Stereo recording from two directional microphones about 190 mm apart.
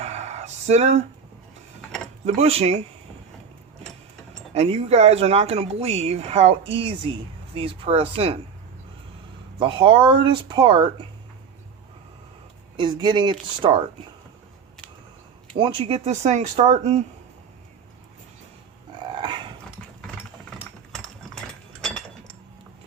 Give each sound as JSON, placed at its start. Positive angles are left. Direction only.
{"t": 0.0, "sound": "a sound", "side_deg": -35}
{"t": 2.2, "sound": "speech", "side_deg": -35}
{"t": 4.5, "sound": "speech", "side_deg": -30}
{"t": 9.6, "sound": "speech", "side_deg": -25}
{"t": 12.7, "sound": "speech", "side_deg": -25}
{"t": 15.5, "sound": "speech", "side_deg": -25}
{"t": 19.2, "sound": "dog", "side_deg": -25}
{"t": 21.8, "sound": "chink", "side_deg": 5}